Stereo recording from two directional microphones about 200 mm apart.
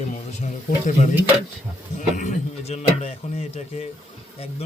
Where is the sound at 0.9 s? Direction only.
35° left (ahead or behind).